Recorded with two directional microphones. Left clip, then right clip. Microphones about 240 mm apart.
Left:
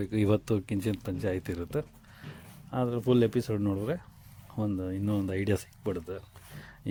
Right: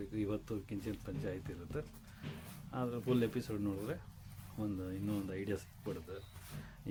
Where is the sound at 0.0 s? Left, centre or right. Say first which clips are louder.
Left 12 dB; left.